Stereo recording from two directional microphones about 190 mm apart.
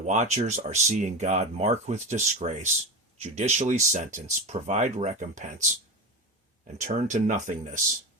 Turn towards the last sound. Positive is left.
turn(degrees=-40)  # may be behind; listen again after turning